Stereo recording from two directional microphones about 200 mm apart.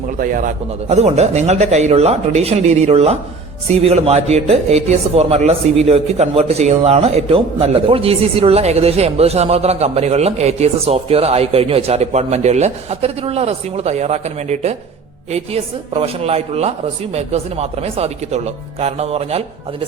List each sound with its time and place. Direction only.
0.2 s speech: 45° right (ahead or behind)
15.9 s speech: 30° right (ahead or behind)